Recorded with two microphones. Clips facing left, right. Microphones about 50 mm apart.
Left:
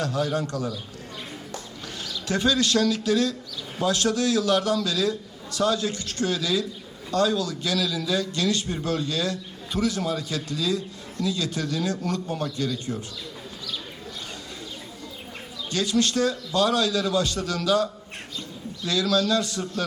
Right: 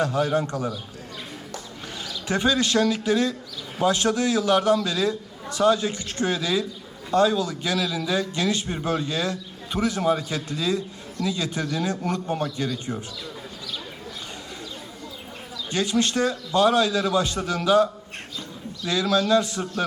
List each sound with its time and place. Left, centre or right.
0.0 s a man's voice: right
2.2 s a man's voice: right
15.7 s a man's voice: right
18.9 s a man's voice: right